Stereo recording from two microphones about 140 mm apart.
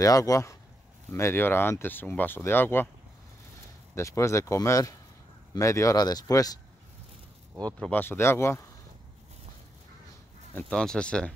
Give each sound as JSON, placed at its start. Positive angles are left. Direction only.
{"t": 0.0, "sound": "speech", "side_deg": 25}
{"t": 3.9, "sound": "speech", "side_deg": 20}
{"t": 7.8, "sound": "speech", "side_deg": 15}
{"t": 10.5, "sound": "speech", "side_deg": 5}